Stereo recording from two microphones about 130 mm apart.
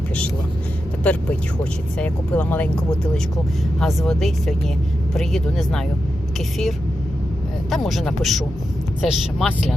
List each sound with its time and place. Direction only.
1.0 s speech: 10° left (ahead or behind)
7.7 s speech: centre (ahead or behind)